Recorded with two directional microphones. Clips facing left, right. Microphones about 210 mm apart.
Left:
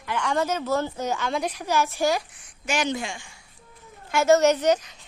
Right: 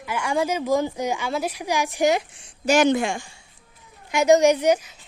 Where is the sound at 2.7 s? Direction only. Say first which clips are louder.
Right 8 dB; 55° right (ahead or behind).